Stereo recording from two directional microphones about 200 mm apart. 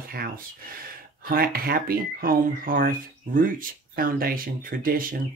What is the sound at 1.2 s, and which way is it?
Speech, 50° right (ahead or behind).